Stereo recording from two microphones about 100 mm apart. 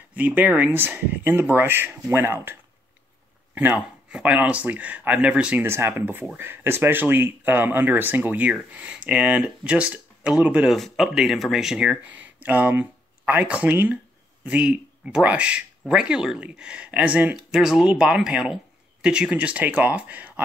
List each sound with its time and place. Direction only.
0.1 s speech: 15° right (ahead or behind)
3.5 s speech: 20° right (ahead or behind)
5.7 s speech: 25° right (ahead or behind)
10.8 s speech: centre (ahead or behind)